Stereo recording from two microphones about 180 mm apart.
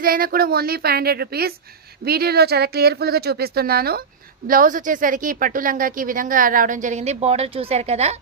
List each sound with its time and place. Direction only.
0.0 s a woman's voice: 55° right (ahead or behind); by 8.1 s 35° right (ahead or behind)